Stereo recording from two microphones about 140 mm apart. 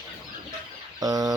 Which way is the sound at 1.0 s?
25° right (ahead or behind).